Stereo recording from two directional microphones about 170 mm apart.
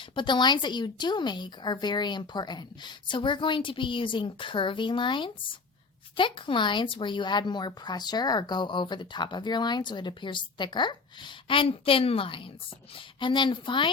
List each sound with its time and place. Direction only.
0.1 s speech: 30° left (ahead or behind)